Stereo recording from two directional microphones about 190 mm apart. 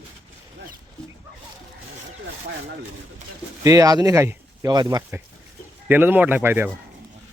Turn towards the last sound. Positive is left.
turn(degrees=-10)  # may be behind; listen again after turning